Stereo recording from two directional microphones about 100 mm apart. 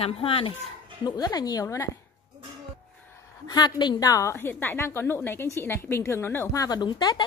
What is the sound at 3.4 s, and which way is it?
Speech, 45° left (ahead or behind).